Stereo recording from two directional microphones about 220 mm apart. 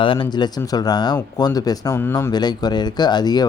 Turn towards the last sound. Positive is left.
turn(degrees=20)  # may be behind; listen again after turning